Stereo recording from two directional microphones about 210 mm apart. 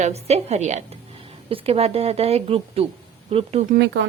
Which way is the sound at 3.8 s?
60° right (ahead or behind).